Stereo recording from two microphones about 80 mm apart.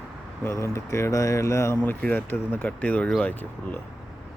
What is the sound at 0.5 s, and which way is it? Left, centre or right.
Speech, left.